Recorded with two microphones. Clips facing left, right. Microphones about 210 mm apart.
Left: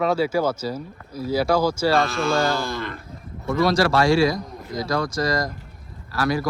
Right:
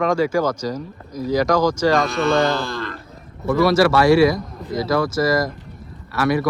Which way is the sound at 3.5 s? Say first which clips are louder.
Right 4 dB; centre (ahead or behind).